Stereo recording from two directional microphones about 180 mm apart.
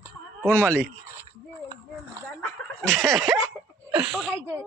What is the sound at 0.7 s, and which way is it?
Speech, 15° right (ahead or behind).